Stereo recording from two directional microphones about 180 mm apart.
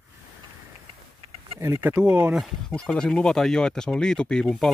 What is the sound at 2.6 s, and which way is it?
Speech, 5° left (ahead or behind).